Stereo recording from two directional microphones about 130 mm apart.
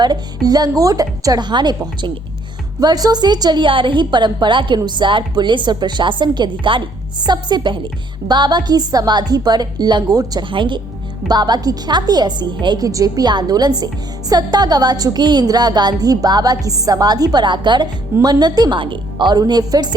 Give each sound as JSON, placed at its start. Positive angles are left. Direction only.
{"t": 0.0, "sound": "a woman's voice", "side_deg": -30}